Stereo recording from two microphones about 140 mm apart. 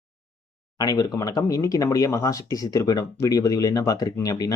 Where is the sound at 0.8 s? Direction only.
25° left (ahead or behind).